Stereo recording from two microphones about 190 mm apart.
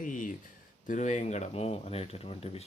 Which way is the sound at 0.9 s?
40° left (ahead or behind).